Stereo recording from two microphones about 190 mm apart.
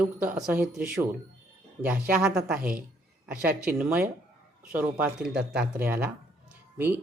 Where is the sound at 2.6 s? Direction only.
50° right (ahead or behind).